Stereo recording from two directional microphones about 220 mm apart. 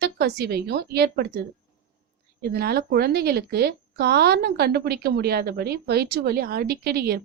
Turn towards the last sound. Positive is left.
turn(degrees=-45)  # may be behind; listen again after turning